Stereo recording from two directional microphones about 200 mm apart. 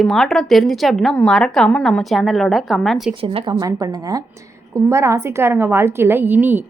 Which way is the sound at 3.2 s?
25° right (ahead or behind).